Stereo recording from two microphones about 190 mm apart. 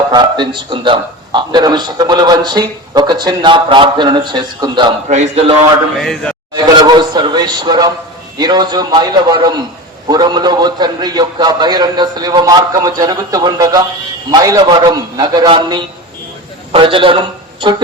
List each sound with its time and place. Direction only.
0.1 s a man's voice: 25° right (ahead or behind)
5.0 s speech: 35° right (ahead or behind)
6.0 s a man's voice: 5° left (ahead or behind)
6.7 s a man's voice: 20° right (ahead or behind)